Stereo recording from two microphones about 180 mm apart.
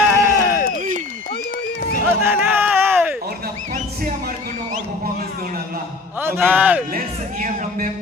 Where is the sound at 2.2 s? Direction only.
10° right (ahead or behind).